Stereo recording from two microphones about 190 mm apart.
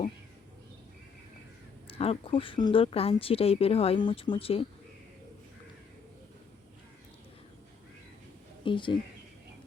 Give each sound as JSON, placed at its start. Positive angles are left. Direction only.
{"t": 1.9, "sound": "speech", "side_deg": 30}
{"t": 8.6, "sound": "speech", "side_deg": 25}